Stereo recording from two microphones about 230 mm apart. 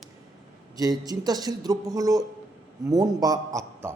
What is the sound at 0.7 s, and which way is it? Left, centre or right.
A man's voice, centre.